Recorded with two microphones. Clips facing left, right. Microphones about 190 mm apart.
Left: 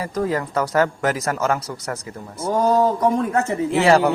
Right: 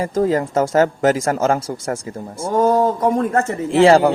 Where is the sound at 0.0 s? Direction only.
25° right (ahead or behind).